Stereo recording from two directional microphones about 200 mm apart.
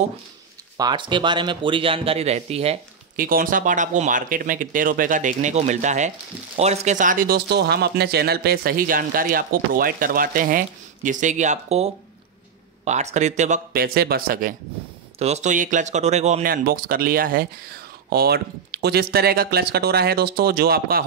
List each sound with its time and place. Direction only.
0.7 s speech: 20° right (ahead or behind)
3.2 s speech: 45° right (ahead or behind)
15.1 s speech: 35° right (ahead or behind)
16.4 s speech: 45° right (ahead or behind)